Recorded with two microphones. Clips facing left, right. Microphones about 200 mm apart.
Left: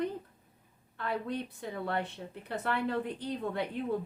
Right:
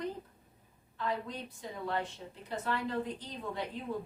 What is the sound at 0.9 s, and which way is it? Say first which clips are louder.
A woman's voice: left 2 dB; 60° left (ahead or behind).